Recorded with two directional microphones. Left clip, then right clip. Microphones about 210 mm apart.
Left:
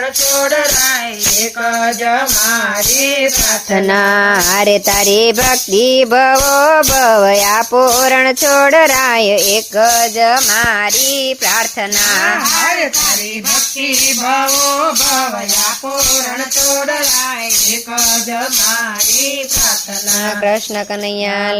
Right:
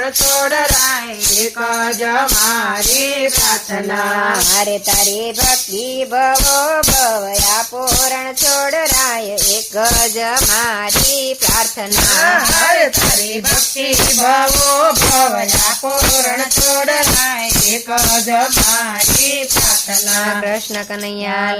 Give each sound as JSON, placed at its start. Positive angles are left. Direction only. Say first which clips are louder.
{"t": 4.5, "sound": "music", "louder": "left 5 dB", "side_deg": 50}
{"t": 6.0, "sound": "music", "louder": "even", "side_deg": 50}
{"t": 9.7, "sound": "music", "louder": "left 5 dB", "side_deg": 10}
{"t": 14.3, "sound": "music", "louder": "right 1 dB", "side_deg": -45}